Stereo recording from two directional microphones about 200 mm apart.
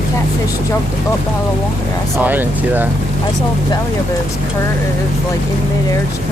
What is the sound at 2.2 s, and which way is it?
Speech, 10° right (ahead or behind).